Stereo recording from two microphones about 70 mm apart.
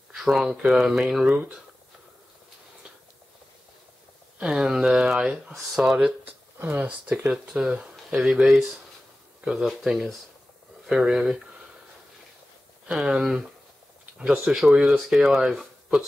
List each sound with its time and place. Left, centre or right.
0.1 s speech: centre
4.4 s speech: centre
6.2 s a sound: right
6.8 s speech: centre
10.9 s speech: centre
12.9 s speech: centre